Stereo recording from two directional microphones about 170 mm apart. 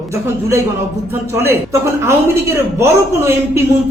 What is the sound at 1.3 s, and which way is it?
A woman's voice, 15° right (ahead or behind).